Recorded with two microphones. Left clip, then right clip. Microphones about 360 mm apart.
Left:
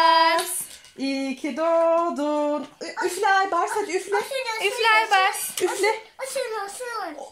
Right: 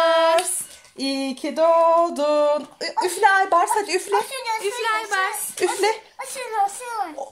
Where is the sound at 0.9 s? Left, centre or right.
Right.